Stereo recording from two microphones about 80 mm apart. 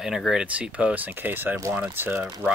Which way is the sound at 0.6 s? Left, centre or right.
Centre.